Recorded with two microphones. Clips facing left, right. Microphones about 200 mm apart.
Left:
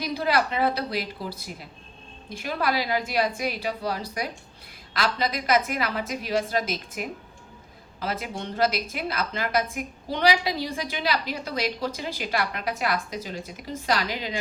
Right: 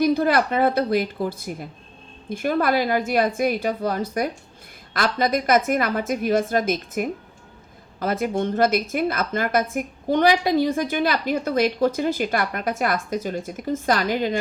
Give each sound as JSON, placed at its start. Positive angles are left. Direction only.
{"t": 0.0, "sound": "a woman's voice", "side_deg": -50}